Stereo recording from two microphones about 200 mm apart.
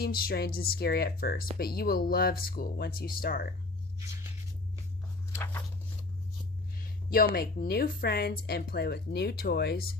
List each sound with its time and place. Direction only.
0.0 s speech: 50° left (ahead or behind)
4.0 s a sound: 15° right (ahead or behind)
7.3 s speech: 50° left (ahead or behind)